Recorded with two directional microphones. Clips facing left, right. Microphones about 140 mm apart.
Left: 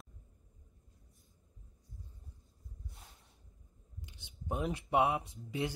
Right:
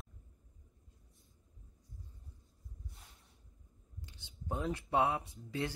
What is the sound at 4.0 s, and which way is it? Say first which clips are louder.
Speech: left 1 dB; 20° left (ahead or behind).